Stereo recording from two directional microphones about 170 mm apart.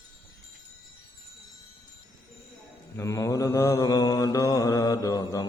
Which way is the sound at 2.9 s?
20° left (ahead or behind).